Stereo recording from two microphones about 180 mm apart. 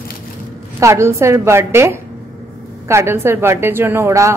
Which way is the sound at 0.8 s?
15° right (ahead or behind).